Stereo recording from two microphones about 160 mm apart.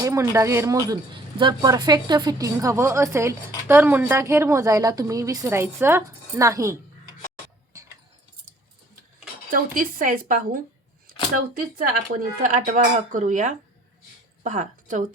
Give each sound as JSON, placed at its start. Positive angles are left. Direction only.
{"t": 0.0, "sound": "a woman's voice", "side_deg": -20}
{"t": 9.5, "sound": "speech", "side_deg": -60}
{"t": 12.2, "sound": "speech", "side_deg": -55}